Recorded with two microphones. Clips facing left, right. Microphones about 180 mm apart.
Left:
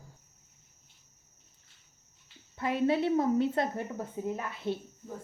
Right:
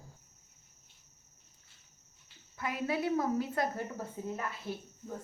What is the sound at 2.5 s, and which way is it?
A woman's voice, 30° left (ahead or behind).